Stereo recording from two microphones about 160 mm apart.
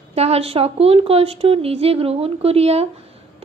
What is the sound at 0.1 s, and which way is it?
A woman's voice, 40° right (ahead or behind).